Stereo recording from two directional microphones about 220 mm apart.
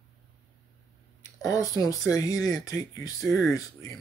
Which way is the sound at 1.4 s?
15° left (ahead or behind).